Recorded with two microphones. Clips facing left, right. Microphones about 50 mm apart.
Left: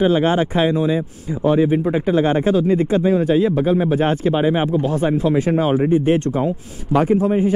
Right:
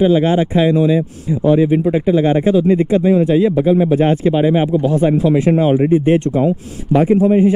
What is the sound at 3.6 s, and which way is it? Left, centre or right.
Speech, centre.